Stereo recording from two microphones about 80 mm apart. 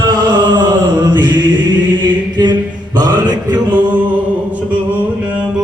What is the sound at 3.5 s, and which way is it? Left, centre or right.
A capella, right.